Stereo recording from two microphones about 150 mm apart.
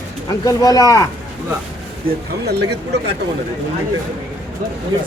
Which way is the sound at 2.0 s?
90° right.